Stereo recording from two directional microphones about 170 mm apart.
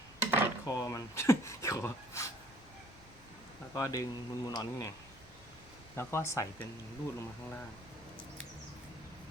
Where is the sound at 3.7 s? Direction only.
20° left (ahead or behind).